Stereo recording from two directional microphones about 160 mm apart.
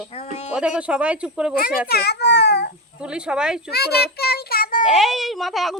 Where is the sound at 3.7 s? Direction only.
85° left.